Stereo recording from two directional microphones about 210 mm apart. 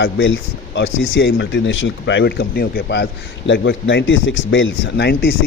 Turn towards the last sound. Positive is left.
turn(degrees=50)  # may be behind; listen again after turning